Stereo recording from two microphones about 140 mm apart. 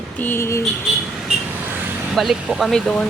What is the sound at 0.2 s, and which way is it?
Speech, 15° left (ahead or behind).